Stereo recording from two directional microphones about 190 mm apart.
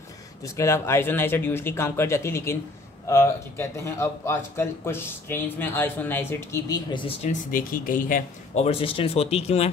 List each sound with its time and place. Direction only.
0.4 s speech: 15° left (ahead or behind); by 8.6 s 45° left (ahead or behind)
8.6 s speech: 30° left (ahead or behind)